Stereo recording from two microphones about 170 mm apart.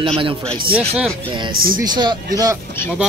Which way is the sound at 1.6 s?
55° right (ahead or behind).